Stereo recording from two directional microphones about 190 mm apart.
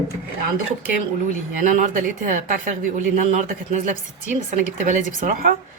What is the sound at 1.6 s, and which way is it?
Speech, 40° right (ahead or behind).